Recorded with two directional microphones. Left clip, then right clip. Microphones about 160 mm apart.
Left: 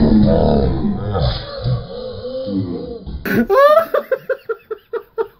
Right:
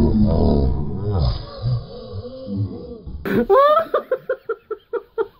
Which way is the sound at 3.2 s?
35° right (ahead or behind).